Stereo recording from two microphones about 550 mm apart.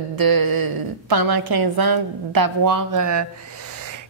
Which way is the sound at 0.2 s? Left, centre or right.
Right.